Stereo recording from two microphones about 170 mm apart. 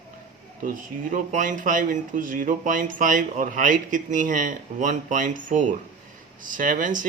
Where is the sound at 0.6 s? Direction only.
50° right (ahead or behind).